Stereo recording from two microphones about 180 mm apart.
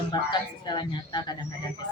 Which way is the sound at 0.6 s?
25° left (ahead or behind).